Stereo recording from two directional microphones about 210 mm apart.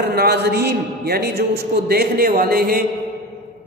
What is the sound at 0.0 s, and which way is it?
A man's voice, 50° right (ahead or behind).